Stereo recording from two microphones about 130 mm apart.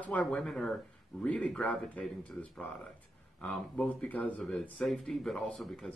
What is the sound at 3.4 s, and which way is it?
Speech, 10° left (ahead or behind).